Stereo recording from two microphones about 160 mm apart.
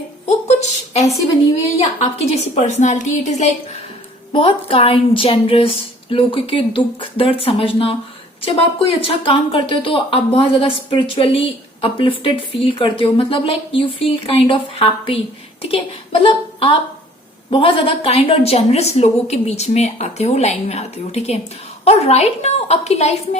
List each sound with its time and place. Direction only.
0.3 s a sound: 45° left (ahead or behind)
2.6 s a woman's voice: 45° left (ahead or behind)
4.3 s speech: 35° left (ahead or behind)